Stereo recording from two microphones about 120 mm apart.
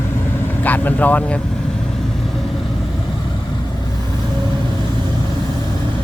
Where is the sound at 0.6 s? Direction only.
15° left (ahead or behind).